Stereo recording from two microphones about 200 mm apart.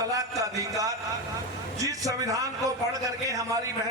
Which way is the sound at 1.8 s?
15° right (ahead or behind).